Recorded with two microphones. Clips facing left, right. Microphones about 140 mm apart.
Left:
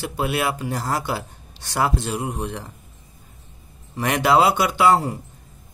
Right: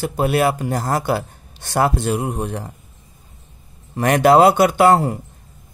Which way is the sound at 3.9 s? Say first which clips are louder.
Right 5 dB; 50° right (ahead or behind).